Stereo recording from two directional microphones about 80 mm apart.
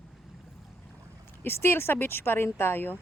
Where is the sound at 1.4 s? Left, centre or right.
Left.